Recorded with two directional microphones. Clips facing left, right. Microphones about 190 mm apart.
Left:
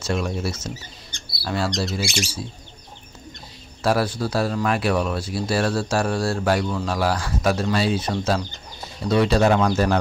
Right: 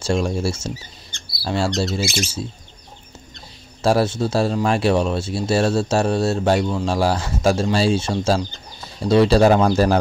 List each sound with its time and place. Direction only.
0.0 s speech: 30° right (ahead or behind)
2.0 s speech: 45° right (ahead or behind)
3.8 s speech: 25° right (ahead or behind)